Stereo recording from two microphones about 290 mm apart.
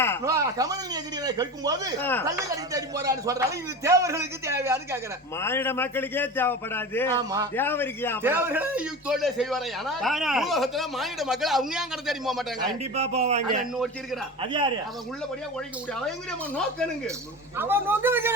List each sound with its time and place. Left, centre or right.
0.3 s a man's voice: centre
2.0 s speech: centre
2.7 s a man's voice: centre
5.4 s speech: centre
7.2 s a man's voice: centre
7.5 s speech: centre
8.2 s a man's voice: centre
13.0 s a man's voice: right
13.7 s a man's voice: centre
14.4 s a man's voice: centre
17.6 s a man's voice: centre